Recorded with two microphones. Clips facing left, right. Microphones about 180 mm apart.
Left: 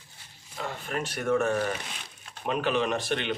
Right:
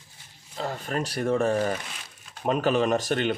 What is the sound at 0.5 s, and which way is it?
Speech, 35° right (ahead or behind).